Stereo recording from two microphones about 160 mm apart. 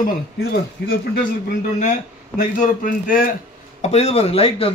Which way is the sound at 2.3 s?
55° left (ahead or behind).